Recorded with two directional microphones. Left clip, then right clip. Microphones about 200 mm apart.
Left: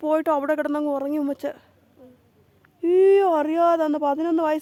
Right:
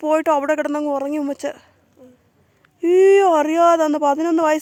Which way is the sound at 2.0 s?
30° right (ahead or behind).